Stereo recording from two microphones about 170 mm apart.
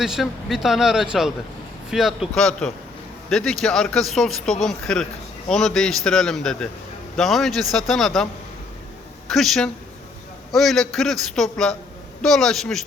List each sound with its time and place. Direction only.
0.0 s speech: centre (ahead or behind)